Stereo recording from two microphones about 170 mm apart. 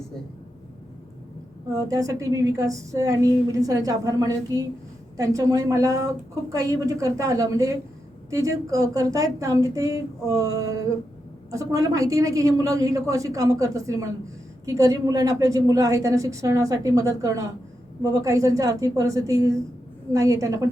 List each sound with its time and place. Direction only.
1.9 s a woman's voice: 20° right (ahead or behind)